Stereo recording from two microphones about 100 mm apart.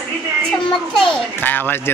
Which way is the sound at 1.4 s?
20° left (ahead or behind).